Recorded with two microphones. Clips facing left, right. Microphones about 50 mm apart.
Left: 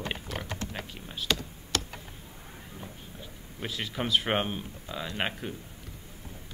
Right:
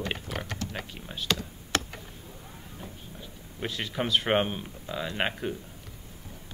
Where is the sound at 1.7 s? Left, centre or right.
Right.